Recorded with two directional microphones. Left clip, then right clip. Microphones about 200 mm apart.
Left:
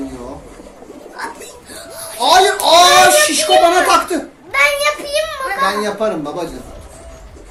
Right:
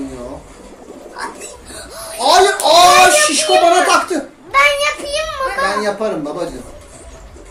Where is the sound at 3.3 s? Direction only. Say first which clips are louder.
Even; 15° left (ahead or behind).